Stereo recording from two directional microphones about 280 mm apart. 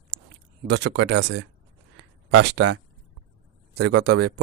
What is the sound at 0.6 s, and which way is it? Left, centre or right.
Speech, right.